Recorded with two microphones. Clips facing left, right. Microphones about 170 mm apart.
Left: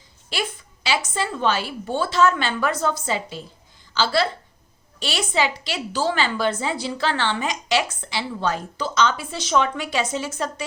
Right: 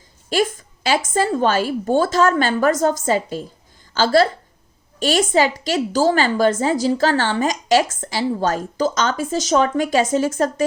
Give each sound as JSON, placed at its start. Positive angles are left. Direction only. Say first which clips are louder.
{"t": 0.3, "sound": "a woman's voice", "louder": "right 9 dB", "side_deg": -45}